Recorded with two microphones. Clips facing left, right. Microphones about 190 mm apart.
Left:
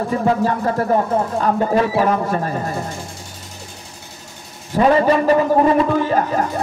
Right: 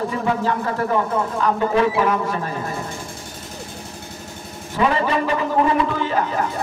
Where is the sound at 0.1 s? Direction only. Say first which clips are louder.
Left 4 dB; 40° left (ahead or behind).